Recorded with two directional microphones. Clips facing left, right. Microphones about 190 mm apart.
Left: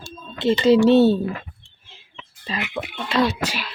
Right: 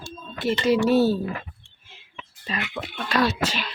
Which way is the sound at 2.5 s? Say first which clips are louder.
Left 2 dB; 30° left (ahead or behind).